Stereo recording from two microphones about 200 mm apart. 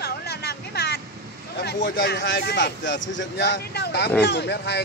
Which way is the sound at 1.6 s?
55° left (ahead or behind).